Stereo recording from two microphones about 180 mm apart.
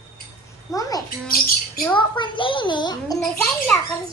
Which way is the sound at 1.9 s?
25° left (ahead or behind).